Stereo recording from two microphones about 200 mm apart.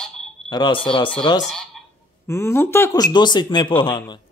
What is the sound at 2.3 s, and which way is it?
A man's voice, 10° left (ahead or behind).